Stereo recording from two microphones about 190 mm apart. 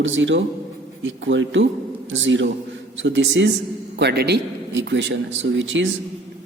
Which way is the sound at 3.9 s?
60° right (ahead or behind).